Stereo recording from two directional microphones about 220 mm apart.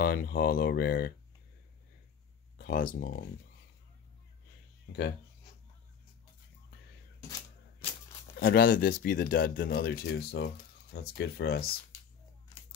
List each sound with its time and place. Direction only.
0.0 s speech: 45° left (ahead or behind)
2.5 s speech: 40° left (ahead or behind)
4.9 s speech: 50° left (ahead or behind)
8.4 s speech: 40° left (ahead or behind)